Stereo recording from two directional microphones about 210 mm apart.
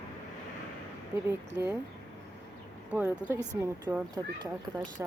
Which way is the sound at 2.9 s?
10° right (ahead or behind).